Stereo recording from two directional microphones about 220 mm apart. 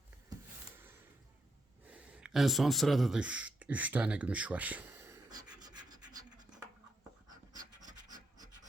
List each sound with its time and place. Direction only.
1.9 s a sound: 5° right (ahead or behind)
7.5 s scratch: 35° right (ahead or behind)
8.0 s scratch: 15° right (ahead or behind)